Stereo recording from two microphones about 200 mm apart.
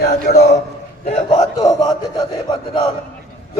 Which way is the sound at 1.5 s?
20° left (ahead or behind).